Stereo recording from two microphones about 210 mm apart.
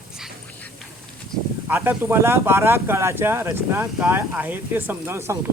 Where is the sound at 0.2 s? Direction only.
Centre (ahead or behind).